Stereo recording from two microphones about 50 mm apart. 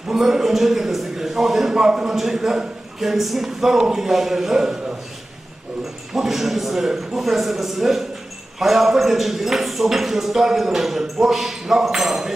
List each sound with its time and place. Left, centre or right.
0.1 s a sound: centre
2.1 s speech: centre
6.1 s speech: centre